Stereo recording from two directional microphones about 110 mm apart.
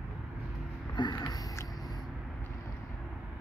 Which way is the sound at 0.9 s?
40° left (ahead or behind).